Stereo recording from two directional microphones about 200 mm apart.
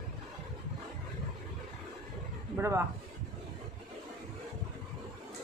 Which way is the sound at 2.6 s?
15° right (ahead or behind).